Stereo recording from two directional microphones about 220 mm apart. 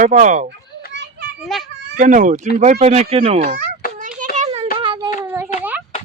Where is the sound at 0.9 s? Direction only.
50° right (ahead or behind).